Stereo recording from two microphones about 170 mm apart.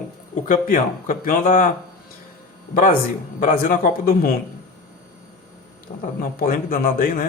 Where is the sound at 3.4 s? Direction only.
55° left (ahead or behind).